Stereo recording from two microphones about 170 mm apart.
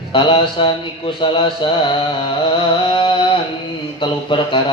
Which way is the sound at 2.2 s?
30° left (ahead or behind).